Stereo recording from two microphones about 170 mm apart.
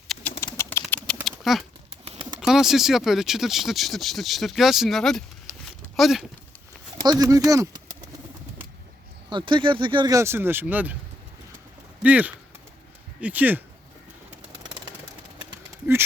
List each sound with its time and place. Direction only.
0.1 s bird: 10° left (ahead or behind)
0.4 s a sound: 15° left (ahead or behind)
2.4 s speech: centre (ahead or behind)
7.0 s speech: 20° right (ahead or behind)
9.3 s speech: 30° right (ahead or behind); by 10.9 s 10° right (ahead or behind)
12.0 s speech: 10° right (ahead or behind)